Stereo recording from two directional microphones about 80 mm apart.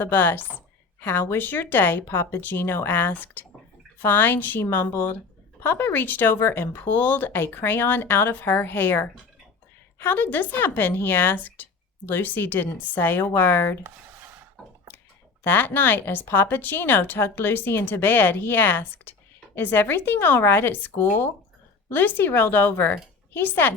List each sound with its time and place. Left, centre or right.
0.0 s speech: left
14.6 s a sound: centre
15.4 s speech: left